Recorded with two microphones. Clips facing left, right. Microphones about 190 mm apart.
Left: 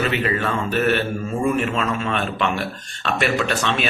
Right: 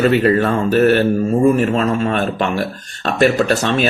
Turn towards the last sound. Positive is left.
turn(degrees=-40)  # may be behind; listen again after turning